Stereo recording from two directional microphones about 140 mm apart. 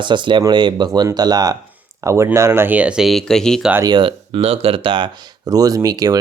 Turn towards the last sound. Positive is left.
turn(degrees=-25)  # may be behind; listen again after turning